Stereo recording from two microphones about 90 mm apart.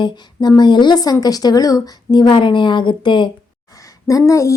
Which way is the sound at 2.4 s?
65° left (ahead or behind).